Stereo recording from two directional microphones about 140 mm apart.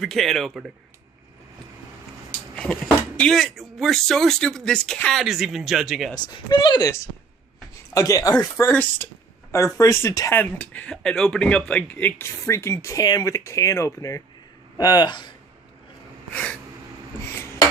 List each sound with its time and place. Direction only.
0.0 s speech: centre (ahead or behind)
3.2 s speech: 5° left (ahead or behind)
6.2 s speech: 35° left (ahead or behind)
8.7 s speech: 10° left (ahead or behind)
9.7 s speech: 20° left (ahead or behind)
10.4 s speech: 10° left (ahead or behind); by 15.3 s 30° left (ahead or behind)
16.3 s speech: 10° left (ahead or behind)